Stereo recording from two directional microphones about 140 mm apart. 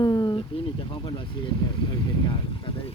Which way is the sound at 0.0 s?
30° left (ahead or behind).